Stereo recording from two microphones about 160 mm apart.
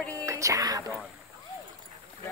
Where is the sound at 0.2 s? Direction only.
20° right (ahead or behind).